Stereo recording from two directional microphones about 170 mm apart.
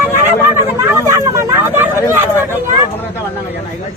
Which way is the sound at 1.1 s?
15° right (ahead or behind).